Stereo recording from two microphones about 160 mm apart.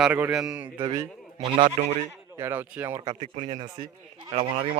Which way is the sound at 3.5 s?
30° right (ahead or behind).